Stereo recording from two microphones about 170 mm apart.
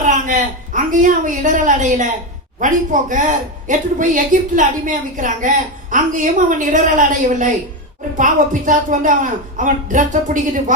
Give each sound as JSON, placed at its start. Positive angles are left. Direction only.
{"t": 0.0, "sound": "a woman's voice", "side_deg": -50}